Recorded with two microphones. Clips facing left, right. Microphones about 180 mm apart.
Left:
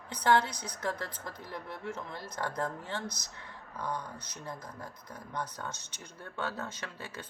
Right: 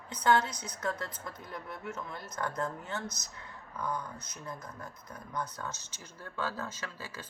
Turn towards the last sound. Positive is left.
turn(degrees=25)  # may be behind; listen again after turning